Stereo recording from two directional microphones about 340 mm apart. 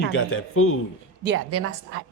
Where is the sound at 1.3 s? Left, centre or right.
Right.